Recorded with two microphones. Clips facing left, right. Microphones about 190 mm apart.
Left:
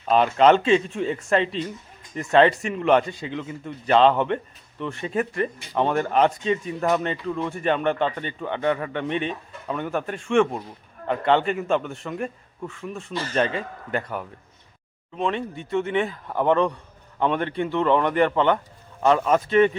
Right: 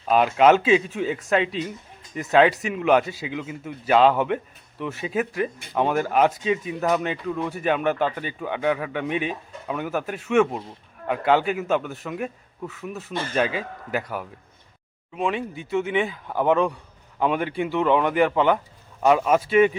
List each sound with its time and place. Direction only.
0.0 s speech: 5° right (ahead or behind)